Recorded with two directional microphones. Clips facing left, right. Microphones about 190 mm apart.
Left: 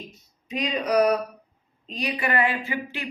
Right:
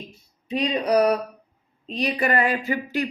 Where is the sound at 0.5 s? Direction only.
35° right (ahead or behind).